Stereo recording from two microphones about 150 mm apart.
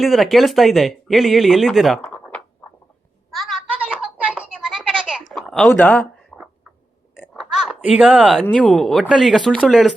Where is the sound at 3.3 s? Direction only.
Centre (ahead or behind).